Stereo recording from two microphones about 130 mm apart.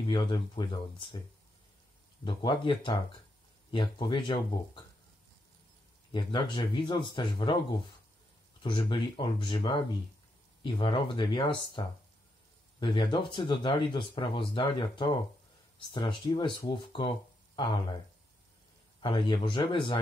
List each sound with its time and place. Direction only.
0.1 s speech: 35° left (ahead or behind)
2.2 s speech: 40° left (ahead or behind)
6.1 s speech: 35° left (ahead or behind)
8.6 s speech: 40° left (ahead or behind)
12.8 s speech: 40° left (ahead or behind)
18.9 s speech: 40° left (ahead or behind)